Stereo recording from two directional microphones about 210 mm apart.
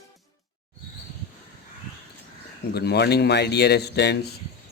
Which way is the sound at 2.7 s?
50° left (ahead or behind).